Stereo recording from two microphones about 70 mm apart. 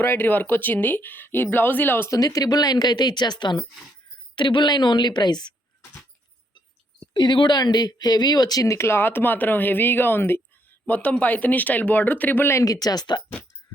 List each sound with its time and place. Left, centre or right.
0.0 s speech: left
2.0 s a woman's voice: left
7.2 s speech: left
10.8 s speech: left
12.5 s speech: left